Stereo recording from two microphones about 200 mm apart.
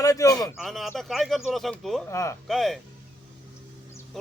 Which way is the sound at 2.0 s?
15° left (ahead or behind).